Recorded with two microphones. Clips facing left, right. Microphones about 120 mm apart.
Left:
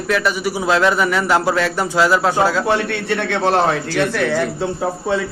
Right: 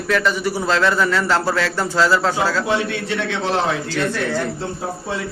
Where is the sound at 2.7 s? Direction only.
60° left (ahead or behind); by 4.5 s 75° left (ahead or behind).